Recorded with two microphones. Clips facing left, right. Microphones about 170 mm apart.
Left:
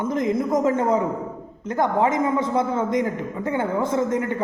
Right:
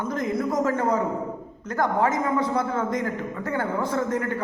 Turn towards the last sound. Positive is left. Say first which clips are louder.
# left 3 dB
turn(degrees=20)  # may be behind; listen again after turning